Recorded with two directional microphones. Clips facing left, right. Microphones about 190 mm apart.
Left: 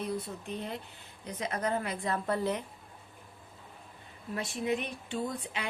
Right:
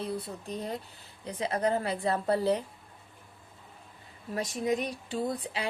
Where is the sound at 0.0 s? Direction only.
35° right (ahead or behind).